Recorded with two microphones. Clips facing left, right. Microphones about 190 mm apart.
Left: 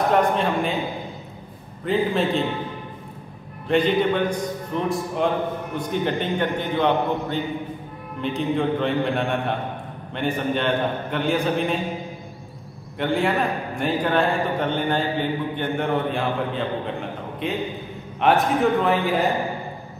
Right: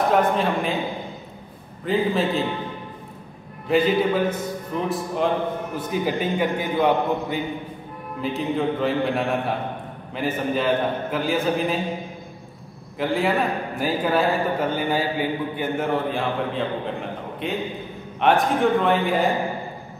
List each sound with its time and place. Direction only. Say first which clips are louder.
0.0 s a man's voice: even; centre (ahead or behind)
1.9 s a man's voice: even; centre (ahead or behind)
3.6 s a man's voice: even; 5° right (ahead or behind)
13.0 s a man's voice: even; centre (ahead or behind)